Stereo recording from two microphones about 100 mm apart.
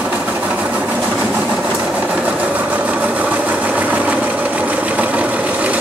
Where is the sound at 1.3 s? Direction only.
10° right (ahead or behind).